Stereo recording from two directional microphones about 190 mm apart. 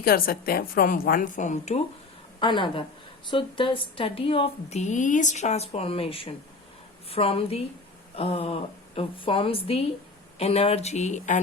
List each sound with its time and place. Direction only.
0.0 s a woman's voice: 50° left (ahead or behind)
2.4 s speech: 25° left (ahead or behind)